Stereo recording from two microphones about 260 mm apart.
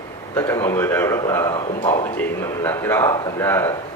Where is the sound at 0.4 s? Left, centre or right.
Centre.